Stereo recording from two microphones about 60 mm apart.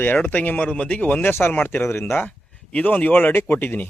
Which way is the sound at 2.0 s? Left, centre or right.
Left.